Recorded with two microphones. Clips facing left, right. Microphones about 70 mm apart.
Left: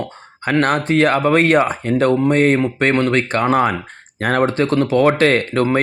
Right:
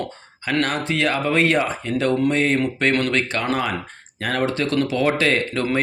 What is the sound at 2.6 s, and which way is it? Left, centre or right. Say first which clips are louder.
Speech: left 4 dB; left.